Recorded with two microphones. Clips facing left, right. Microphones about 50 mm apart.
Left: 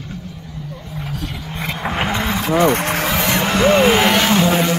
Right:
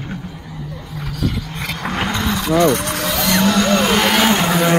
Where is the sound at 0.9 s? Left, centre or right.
Centre.